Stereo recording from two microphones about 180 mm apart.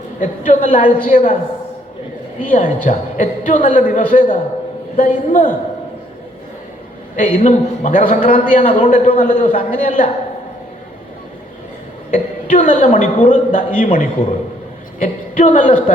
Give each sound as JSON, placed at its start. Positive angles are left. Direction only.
{"t": 0.2, "sound": "a man's voice", "side_deg": 45}
{"t": 2.5, "sound": "a man's voice", "side_deg": 45}
{"t": 7.2, "sound": "a man's voice", "side_deg": 45}
{"t": 12.1, "sound": "a man's voice", "side_deg": 45}